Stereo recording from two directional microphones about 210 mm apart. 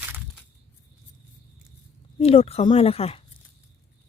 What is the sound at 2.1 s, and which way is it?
Speech, 30° left (ahead or behind).